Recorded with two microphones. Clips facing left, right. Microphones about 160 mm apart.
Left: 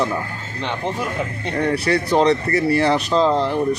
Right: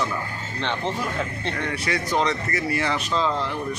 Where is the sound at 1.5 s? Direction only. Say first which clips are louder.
Left 11 dB; 35° left (ahead or behind).